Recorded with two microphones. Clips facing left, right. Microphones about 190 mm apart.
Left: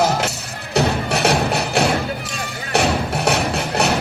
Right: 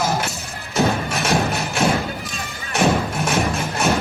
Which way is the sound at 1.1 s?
65° left (ahead or behind).